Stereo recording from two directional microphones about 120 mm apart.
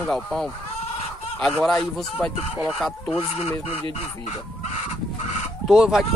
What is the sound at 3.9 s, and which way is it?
Speech, 65° left (ahead or behind).